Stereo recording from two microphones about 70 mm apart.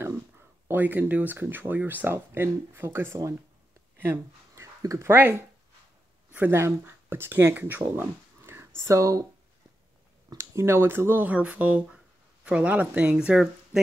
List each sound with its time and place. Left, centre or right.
0.7 s speech: right
4.0 s a sound: right
4.8 s speech: right
6.5 s speech: right
8.4 s a sound: right
10.3 s speech: right
11.2 s speech: right